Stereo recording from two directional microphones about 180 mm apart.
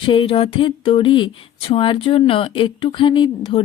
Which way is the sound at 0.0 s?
30° left (ahead or behind).